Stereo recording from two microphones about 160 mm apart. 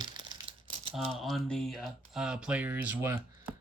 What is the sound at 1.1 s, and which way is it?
Speech, centre (ahead or behind).